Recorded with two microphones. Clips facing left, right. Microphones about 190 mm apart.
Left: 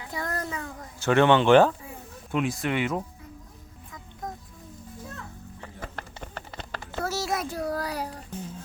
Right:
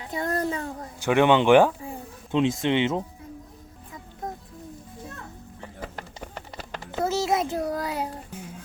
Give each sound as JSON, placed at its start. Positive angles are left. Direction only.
{"t": 0.0, "sound": "a sound", "side_deg": -25}
{"t": 0.9, "sound": "speech", "side_deg": -15}
{"t": 6.0, "sound": "clip-clop", "side_deg": -10}
{"t": 7.0, "sound": "child singing", "side_deg": -20}
{"t": 8.3, "sound": "music", "side_deg": -10}